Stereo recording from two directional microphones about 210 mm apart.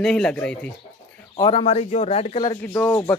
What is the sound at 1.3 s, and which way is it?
A man's voice, 25° left (ahead or behind).